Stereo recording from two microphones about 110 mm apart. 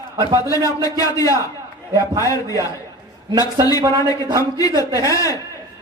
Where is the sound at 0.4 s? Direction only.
30° left (ahead or behind).